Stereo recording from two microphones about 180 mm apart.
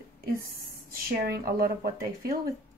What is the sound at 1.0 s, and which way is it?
Speech, 55° right (ahead or behind).